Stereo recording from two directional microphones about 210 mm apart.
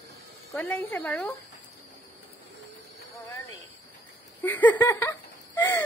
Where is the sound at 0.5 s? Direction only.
10° left (ahead or behind).